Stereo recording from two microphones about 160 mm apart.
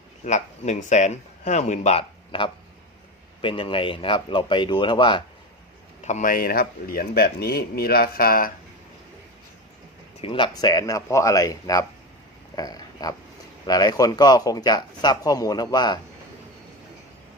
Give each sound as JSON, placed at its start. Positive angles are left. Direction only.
{"t": 0.3, "sound": "speech", "side_deg": 45}
{"t": 6.0, "sound": "speech", "side_deg": 45}
{"t": 10.2, "sound": "speech", "side_deg": 30}
{"t": 12.5, "sound": "a sound", "side_deg": 25}
{"t": 13.7, "sound": "speech", "side_deg": 25}